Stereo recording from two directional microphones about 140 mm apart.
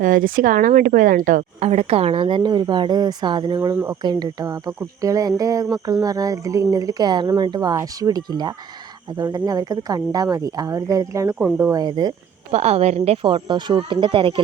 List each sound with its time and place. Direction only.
0.0 s speech: 80° right; by 11.3 s 20° right (ahead or behind)
11.3 s speech: 10° right (ahead or behind)
11.6 s speech: 25° right (ahead or behind)
12.5 s speech: 50° right (ahead or behind)
13.2 s speech: 35° right (ahead or behind)